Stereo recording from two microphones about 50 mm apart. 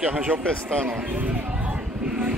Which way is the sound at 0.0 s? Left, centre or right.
Right.